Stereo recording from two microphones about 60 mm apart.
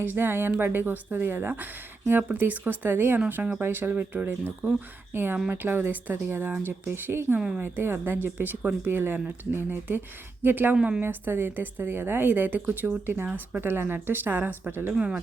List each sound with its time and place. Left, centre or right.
0.0 s speech: right
7.3 s a woman's voice: centre
7.6 s speech: right
10.8 s a woman's voice: centre
11.0 s speech: right
14.9 s a woman's voice: centre